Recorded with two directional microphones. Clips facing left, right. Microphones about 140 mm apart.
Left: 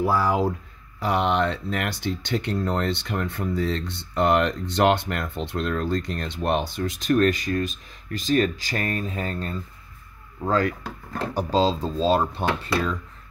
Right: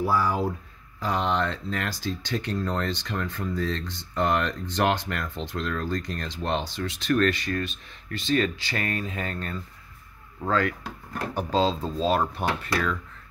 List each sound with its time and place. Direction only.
0.9 s speech: 65° left (ahead or behind)
6.8 s speech: 45° left (ahead or behind); by 12.9 s 30° left (ahead or behind)